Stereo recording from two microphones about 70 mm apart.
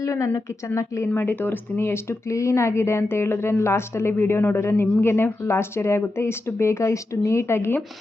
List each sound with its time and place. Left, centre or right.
0.0 s speech: left
1.1 s speech: left